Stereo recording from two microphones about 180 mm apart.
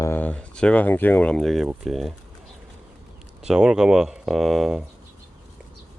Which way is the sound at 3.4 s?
5° right (ahead or behind).